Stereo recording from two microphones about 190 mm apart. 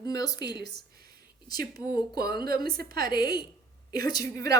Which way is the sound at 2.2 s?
55° right (ahead or behind).